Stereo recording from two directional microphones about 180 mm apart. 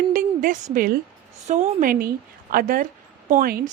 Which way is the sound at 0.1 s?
50° right (ahead or behind).